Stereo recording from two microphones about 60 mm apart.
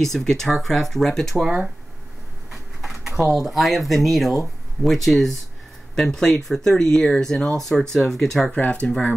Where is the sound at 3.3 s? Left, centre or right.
Centre.